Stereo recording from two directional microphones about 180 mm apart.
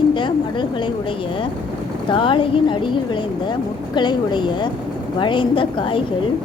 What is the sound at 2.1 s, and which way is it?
Speech, 30° left (ahead or behind).